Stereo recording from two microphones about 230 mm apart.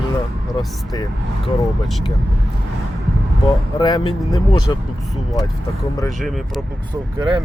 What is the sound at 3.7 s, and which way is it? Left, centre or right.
Speech, centre.